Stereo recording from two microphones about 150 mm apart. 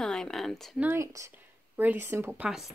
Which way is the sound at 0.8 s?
15° right (ahead or behind).